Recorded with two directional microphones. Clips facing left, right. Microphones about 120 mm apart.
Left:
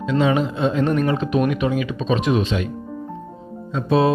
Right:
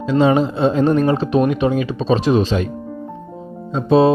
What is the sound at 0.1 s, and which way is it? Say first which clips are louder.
Speech: right 4 dB; 35° right (ahead or behind).